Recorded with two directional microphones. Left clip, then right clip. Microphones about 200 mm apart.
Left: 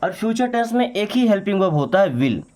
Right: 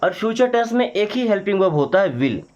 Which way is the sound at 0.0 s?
20° left (ahead or behind).